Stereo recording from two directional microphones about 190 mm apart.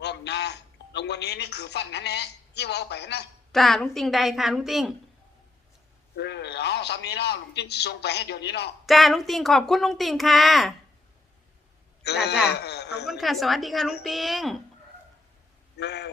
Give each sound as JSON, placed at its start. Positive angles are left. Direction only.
{"t": 0.0, "sound": "a man's voice", "side_deg": 60}
{"t": 3.5, "sound": "speech", "side_deg": 0}
{"t": 6.1, "sound": "a man's voice", "side_deg": 65}
{"t": 8.9, "sound": "speech", "side_deg": 0}
{"t": 12.0, "sound": "a man's voice", "side_deg": 60}
{"t": 13.1, "sound": "speech", "side_deg": 0}
{"t": 15.8, "sound": "a man's voice", "side_deg": 65}